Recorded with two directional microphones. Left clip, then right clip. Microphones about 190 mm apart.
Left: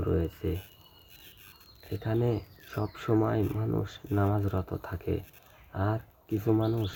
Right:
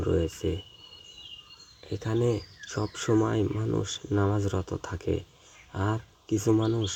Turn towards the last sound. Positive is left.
turn(degrees=-20)  # may be behind; listen again after turning